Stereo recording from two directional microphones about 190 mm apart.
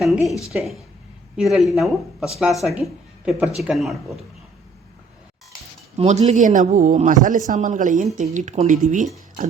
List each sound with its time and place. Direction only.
0.0 s speech: centre (ahead or behind)
6.0 s speech: 35° right (ahead or behind)